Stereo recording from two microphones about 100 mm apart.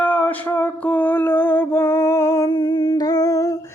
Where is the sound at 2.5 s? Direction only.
45° left (ahead or behind).